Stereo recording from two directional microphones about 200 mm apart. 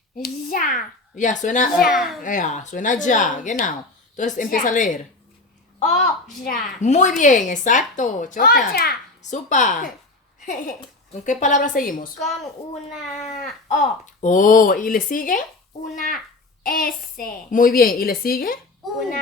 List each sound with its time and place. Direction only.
0.2 s speech: 45° left (ahead or behind)
1.9 s a child's voice: centre (ahead or behind)
2.2 s a child's voice: 40° left (ahead or behind)
9.3 s a child's voice: 40° left (ahead or behind)
13.7 s a woman's voice: 40° left (ahead or behind)
18.9 s a child's voice: centre (ahead or behind)